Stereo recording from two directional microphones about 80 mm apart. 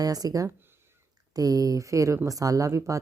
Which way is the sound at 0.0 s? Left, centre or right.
Right.